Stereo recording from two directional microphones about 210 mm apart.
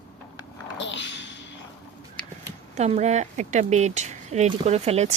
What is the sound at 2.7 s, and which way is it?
Speech, 30° right (ahead or behind).